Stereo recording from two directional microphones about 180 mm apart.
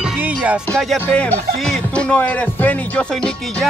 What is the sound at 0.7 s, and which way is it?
Speech, 5° left (ahead or behind).